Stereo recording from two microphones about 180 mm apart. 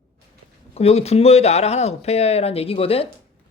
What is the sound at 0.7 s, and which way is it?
Speech, 35° left (ahead or behind).